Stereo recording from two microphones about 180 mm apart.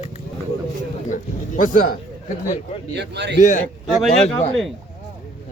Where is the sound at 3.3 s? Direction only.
45° left (ahead or behind).